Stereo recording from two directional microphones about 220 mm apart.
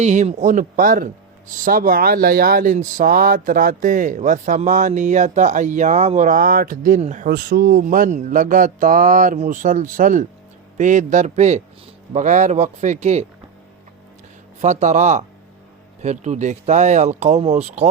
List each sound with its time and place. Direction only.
0.0 s speech: 30° right (ahead or behind)
14.6 s speech: 30° right (ahead or behind)